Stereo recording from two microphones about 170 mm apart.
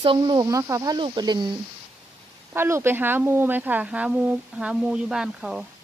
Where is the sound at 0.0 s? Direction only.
30° right (ahead or behind).